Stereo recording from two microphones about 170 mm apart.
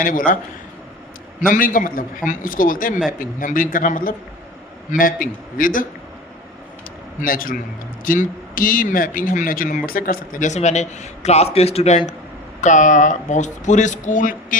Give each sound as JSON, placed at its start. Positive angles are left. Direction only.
{"t": 0.0, "sound": "speech", "side_deg": 55}
{"t": 1.4, "sound": "a man's voice", "side_deg": 55}
{"t": 7.2, "sound": "a man's voice", "side_deg": 55}